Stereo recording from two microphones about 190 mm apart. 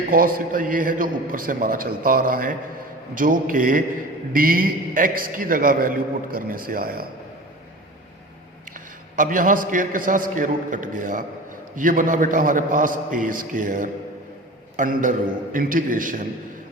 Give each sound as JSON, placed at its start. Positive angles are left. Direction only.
{"t": 0.1, "sound": "a man's voice", "side_deg": -45}
{"t": 9.1, "sound": "a man's voice", "side_deg": -45}